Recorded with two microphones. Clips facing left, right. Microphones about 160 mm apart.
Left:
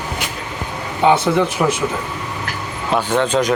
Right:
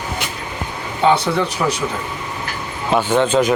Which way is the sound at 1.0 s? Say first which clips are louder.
Left 2 dB; 10° left (ahead or behind).